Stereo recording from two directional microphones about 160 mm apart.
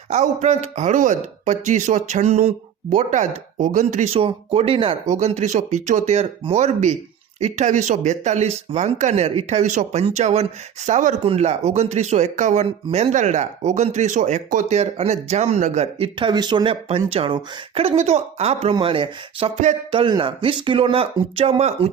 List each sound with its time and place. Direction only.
0.1 s speech: 45° right (ahead or behind)